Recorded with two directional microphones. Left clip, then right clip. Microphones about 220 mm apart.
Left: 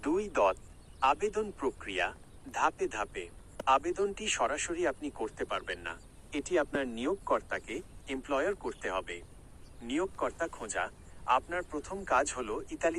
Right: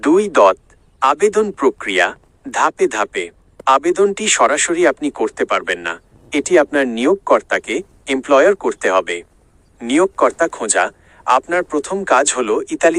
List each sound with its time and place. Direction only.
0.0 s speech: 45° right (ahead or behind)